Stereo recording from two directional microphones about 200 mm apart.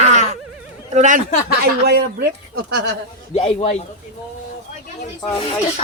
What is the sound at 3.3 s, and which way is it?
Speech, 30° left (ahead or behind).